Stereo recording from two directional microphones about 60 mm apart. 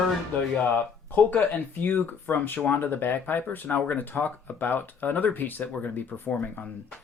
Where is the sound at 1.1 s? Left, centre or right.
Left.